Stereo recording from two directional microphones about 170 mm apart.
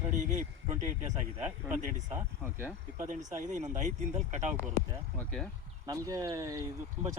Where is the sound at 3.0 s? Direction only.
45° right (ahead or behind).